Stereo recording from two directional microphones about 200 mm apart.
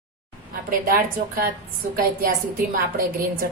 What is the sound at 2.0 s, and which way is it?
A woman's voice, 45° right (ahead or behind).